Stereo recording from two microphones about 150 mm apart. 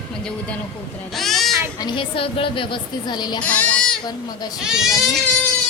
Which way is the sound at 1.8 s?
30° left (ahead or behind).